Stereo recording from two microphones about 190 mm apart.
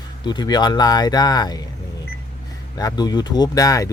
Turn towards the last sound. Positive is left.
turn(degrees=15)  # may be behind; listen again after turning